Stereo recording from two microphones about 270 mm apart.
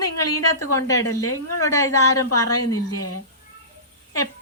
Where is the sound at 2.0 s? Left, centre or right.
Left.